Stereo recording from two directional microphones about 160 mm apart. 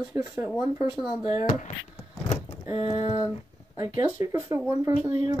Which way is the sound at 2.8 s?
40° left (ahead or behind).